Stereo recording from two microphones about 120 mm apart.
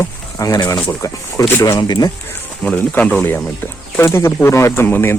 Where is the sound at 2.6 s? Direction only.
10° left (ahead or behind).